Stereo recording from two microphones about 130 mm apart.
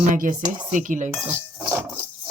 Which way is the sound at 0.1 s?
90° right.